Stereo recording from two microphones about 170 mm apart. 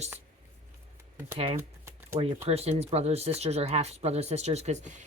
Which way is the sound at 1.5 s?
15° right (ahead or behind).